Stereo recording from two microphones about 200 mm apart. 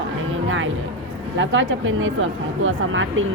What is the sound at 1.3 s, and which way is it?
Speech, 70° right (ahead or behind).